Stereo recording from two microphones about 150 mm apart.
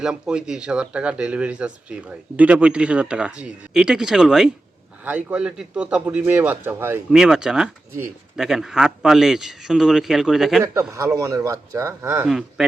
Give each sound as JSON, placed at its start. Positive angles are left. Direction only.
{"t": 0.0, "sound": "speech", "side_deg": -5}
{"t": 10.9, "sound": "speech", "side_deg": -20}